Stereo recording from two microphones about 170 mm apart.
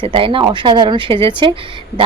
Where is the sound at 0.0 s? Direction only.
30° right (ahead or behind).